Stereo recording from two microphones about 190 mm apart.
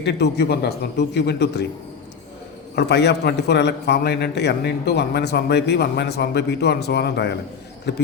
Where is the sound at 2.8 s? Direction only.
60° left (ahead or behind).